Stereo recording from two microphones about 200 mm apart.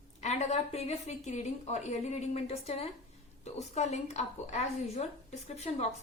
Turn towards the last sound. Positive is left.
turn(degrees=35)  # may be behind; listen again after turning